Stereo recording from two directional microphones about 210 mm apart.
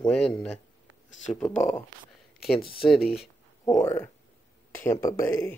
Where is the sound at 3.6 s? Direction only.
15° left (ahead or behind).